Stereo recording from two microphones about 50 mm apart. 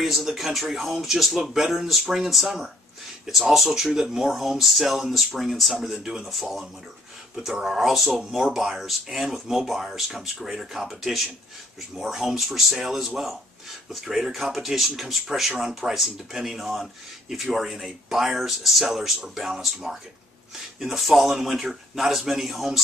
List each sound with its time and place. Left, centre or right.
0.0 s speech: centre